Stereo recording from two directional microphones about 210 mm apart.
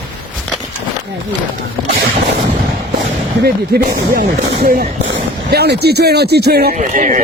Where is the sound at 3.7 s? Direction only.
50° right (ahead or behind).